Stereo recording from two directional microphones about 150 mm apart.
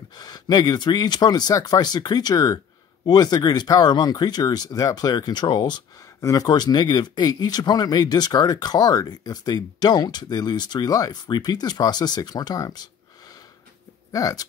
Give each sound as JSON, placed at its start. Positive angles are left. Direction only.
{"t": 0.2, "sound": "speech", "side_deg": 25}
{"t": 14.1, "sound": "speech", "side_deg": 25}